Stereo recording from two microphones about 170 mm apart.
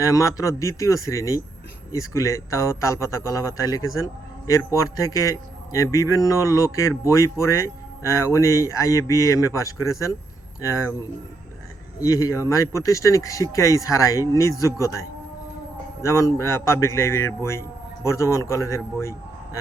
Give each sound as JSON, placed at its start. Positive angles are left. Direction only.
{"t": 0.0, "sound": "a man's voice", "side_deg": 20}
{"t": 11.9, "sound": "a man's voice", "side_deg": 20}